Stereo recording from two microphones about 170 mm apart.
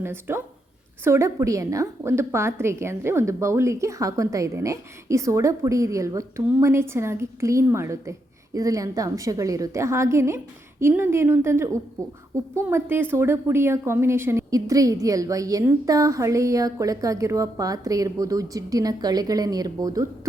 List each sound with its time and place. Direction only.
0.0 s a woman's voice: 15° right (ahead or behind)